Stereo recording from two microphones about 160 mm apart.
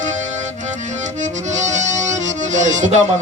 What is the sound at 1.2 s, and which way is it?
Music, 50° right (ahead or behind).